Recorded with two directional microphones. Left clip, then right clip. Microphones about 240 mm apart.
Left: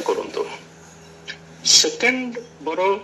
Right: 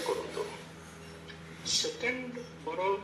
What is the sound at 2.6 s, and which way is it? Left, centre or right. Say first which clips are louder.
Speech: left 12 dB; left.